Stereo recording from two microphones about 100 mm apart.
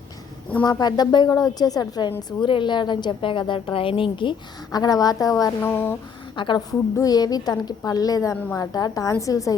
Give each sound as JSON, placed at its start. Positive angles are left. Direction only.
{"t": 0.6, "sound": "a woman's voice", "side_deg": 40}
{"t": 2.0, "sound": "a woman's voice", "side_deg": 55}
{"t": 5.6, "sound": "speech", "side_deg": 20}
{"t": 6.3, "sound": "a woman's voice", "side_deg": 55}
{"t": 6.7, "sound": "a woman's voice", "side_deg": 35}